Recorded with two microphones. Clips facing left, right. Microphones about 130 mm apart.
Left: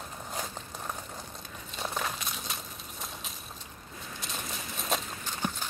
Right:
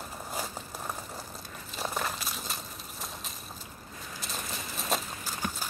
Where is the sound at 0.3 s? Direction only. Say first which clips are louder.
Right 1 dB; 5° right (ahead or behind).